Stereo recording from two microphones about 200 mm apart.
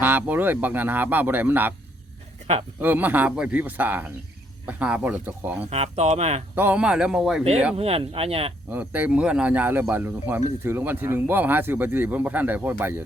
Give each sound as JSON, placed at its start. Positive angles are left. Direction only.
{"t": 0.0, "sound": "speech", "side_deg": -10}
{"t": 2.8, "sound": "speech", "side_deg": -10}
{"t": 5.7, "sound": "speech", "side_deg": -35}
{"t": 6.6, "sound": "speech", "side_deg": -5}
{"t": 7.8, "sound": "speech", "side_deg": -30}
{"t": 8.7, "sound": "speech", "side_deg": -10}